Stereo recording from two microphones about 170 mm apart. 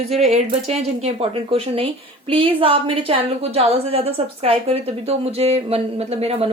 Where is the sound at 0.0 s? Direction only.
40° right (ahead or behind).